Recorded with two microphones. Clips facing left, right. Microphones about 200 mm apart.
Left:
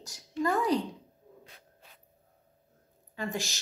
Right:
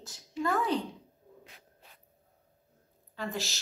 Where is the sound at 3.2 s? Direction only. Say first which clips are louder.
Left 1 dB; 15° left (ahead or behind).